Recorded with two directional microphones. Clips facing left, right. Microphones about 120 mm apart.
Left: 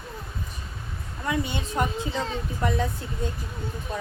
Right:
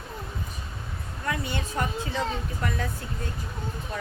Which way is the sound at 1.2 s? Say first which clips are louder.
Left 3 dB; 20° left (ahead or behind).